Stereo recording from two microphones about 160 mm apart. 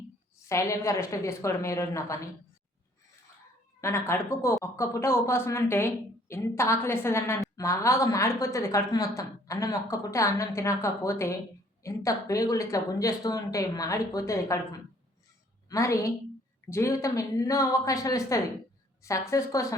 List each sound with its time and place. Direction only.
0.4 s a woman's voice: 20° left (ahead or behind)
3.8 s a woman's voice: 15° left (ahead or behind)